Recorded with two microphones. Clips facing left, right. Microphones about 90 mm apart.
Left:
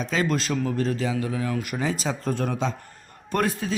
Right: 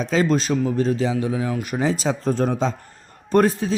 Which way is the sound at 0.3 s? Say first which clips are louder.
Right 5 dB; 20° right (ahead or behind).